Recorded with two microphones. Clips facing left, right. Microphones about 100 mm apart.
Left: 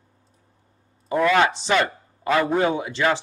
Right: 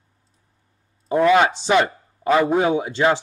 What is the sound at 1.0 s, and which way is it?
A man's voice, 20° right (ahead or behind).